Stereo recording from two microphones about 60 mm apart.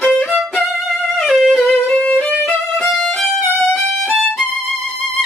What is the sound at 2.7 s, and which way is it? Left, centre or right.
Violin, centre.